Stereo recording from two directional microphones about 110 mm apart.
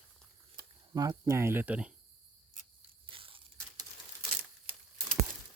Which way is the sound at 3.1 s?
55° right (ahead or behind).